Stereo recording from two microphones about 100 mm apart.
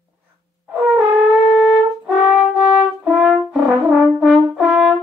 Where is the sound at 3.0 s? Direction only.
5° right (ahead or behind).